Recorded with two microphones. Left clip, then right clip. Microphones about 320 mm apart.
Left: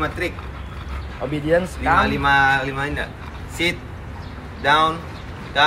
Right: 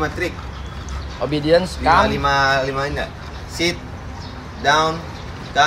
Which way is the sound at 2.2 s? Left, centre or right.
Centre.